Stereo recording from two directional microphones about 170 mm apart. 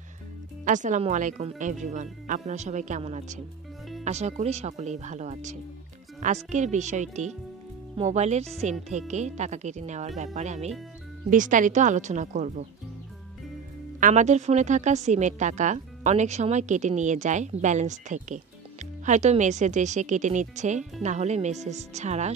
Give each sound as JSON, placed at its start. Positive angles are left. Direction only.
{"t": 0.7, "sound": "a woman's voice", "side_deg": -45}
{"t": 13.9, "sound": "a woman's voice", "side_deg": -45}